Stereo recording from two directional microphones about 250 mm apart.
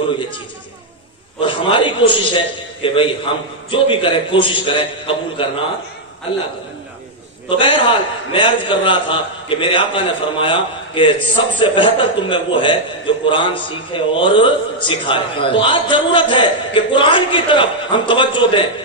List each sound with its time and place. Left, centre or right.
1.4 s a man's voice: centre
7.4 s a man's voice: left